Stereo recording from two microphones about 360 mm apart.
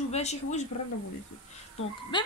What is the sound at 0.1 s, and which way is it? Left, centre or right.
Speech, centre.